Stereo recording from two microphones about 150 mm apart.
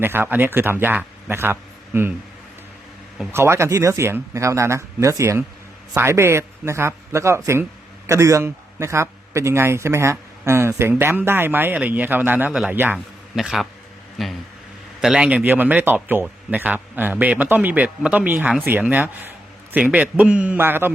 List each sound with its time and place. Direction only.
0.0 s a man's voice: 15° right (ahead or behind)
3.3 s a man's voice: 15° right (ahead or behind)
13.3 s a man's voice: centre (ahead or behind)